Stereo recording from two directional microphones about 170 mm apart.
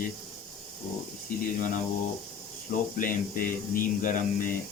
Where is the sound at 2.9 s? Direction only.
55° left (ahead or behind).